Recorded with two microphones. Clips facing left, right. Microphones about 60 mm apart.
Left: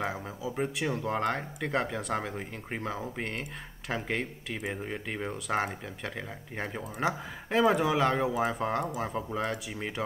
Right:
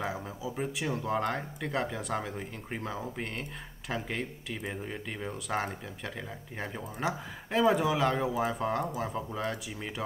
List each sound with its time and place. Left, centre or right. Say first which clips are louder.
0.0 s speech: left 1 dB; centre
4.6 s speech: left 3 dB; centre
5.3 s speech: left 2 dB; centre